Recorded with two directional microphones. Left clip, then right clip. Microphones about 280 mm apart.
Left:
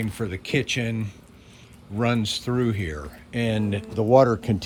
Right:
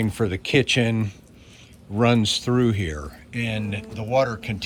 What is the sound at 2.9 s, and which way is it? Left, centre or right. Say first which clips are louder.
Speech: left 1 dB; centre.